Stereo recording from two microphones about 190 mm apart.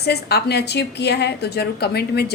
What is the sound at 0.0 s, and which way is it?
A woman's voice, 60° left (ahead or behind).